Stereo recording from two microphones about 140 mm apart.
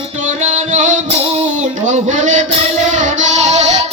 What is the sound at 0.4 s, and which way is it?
Music, 55° right (ahead or behind).